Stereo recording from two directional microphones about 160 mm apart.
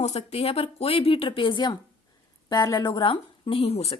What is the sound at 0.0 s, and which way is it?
Speech, 40° left (ahead or behind).